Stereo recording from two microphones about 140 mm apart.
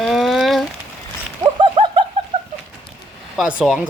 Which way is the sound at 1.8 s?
45° right (ahead or behind).